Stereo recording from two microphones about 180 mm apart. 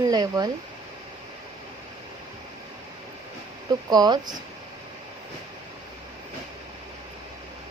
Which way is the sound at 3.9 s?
25° right (ahead or behind).